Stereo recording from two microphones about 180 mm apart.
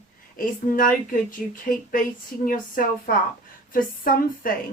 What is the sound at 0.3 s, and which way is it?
Speech, 50° left (ahead or behind).